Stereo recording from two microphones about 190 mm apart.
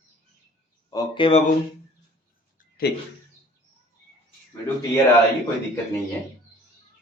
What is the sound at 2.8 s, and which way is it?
Speech, 55° left (ahead or behind).